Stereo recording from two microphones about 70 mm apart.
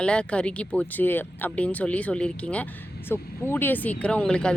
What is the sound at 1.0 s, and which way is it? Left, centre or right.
Speech, left.